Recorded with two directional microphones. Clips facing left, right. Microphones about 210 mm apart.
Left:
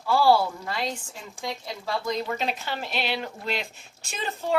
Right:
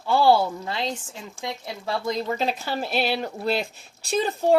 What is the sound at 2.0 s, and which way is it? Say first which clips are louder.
A woman's voice: right 3 dB; 35° right (ahead or behind).